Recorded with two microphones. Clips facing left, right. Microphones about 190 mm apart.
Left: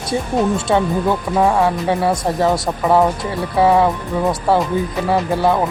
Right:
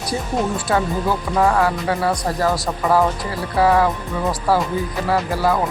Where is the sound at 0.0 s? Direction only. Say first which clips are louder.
Left 4 dB; 25° left (ahead or behind).